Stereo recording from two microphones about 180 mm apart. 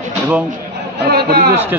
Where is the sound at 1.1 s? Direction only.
60° right (ahead or behind).